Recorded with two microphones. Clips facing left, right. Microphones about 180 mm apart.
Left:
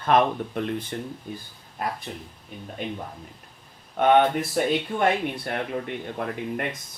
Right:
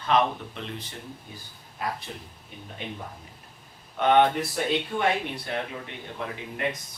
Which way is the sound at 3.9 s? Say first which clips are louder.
Left 2 dB; 50° left (ahead or behind).